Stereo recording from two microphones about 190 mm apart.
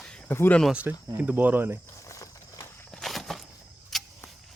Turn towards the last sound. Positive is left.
turn(degrees=0)  # may be behind; listen again after turning